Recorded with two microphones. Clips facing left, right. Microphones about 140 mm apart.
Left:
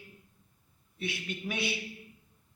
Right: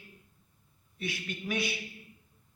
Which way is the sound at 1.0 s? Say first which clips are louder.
Left 1 dB; 25° left (ahead or behind).